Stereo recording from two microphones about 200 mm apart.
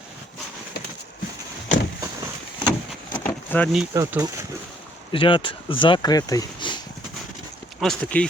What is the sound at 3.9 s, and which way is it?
Speech, 15° right (ahead or behind).